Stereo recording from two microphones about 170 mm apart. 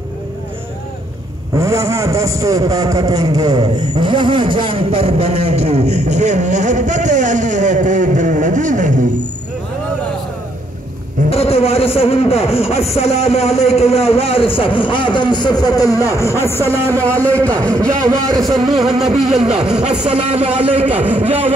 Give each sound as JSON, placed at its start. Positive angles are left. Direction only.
{"t": 1.5, "sound": "a man's voice", "side_deg": -20}
{"t": 11.2, "sound": "a man's voice", "side_deg": 35}
{"t": 17.7, "sound": "a man's voice", "side_deg": -20}
{"t": 18.7, "sound": "a sound", "side_deg": 0}
{"t": 20.1, "sound": "a man's voice", "side_deg": -35}
{"t": 20.9, "sound": "a man's voice", "side_deg": -10}